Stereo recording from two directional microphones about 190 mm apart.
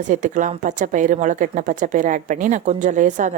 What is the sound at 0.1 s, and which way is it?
A woman's voice, 40° right (ahead or behind).